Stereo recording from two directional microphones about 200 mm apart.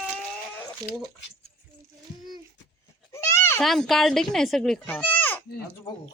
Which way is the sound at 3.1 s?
15° left (ahead or behind).